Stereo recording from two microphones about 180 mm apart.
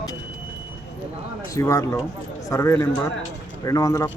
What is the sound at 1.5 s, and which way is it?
Speech, 15° left (ahead or behind).